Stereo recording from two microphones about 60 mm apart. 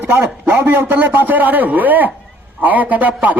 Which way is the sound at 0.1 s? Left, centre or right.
Right.